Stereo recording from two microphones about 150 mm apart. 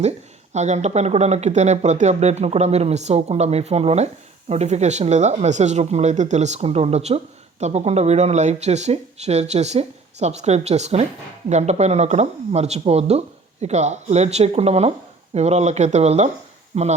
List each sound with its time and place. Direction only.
0.5 s speech: 50° right (ahead or behind)